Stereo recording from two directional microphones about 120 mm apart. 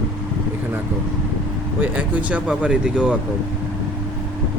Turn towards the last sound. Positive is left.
turn(degrees=-5)  # may be behind; listen again after turning